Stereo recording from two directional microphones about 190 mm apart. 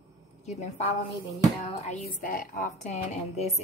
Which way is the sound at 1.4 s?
35° left (ahead or behind).